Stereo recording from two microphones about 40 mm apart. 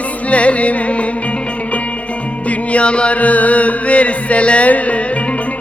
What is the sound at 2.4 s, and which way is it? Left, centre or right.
Music, left.